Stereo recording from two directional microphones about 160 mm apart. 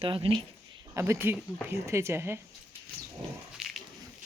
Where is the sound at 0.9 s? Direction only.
15° right (ahead or behind).